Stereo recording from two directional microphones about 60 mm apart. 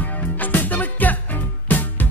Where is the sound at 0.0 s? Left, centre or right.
Left.